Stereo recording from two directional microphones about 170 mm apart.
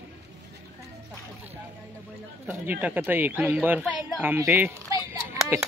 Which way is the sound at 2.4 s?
10° right (ahead or behind).